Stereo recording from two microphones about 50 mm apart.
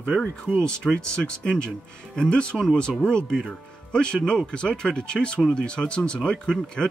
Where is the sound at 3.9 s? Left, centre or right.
Centre.